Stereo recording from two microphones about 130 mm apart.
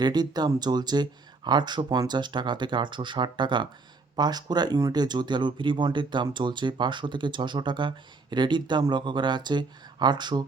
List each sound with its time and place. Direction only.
0.0 s speech: 30° right (ahead or behind)